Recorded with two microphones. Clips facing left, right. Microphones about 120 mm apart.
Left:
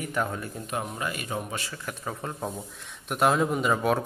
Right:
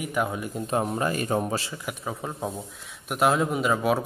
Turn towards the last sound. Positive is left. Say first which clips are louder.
# right 1 dB
turn(degrees=-5)  # may be behind; listen again after turning